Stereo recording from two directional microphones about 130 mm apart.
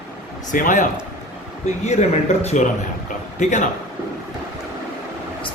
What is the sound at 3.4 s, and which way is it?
Speech, 70° left (ahead or behind).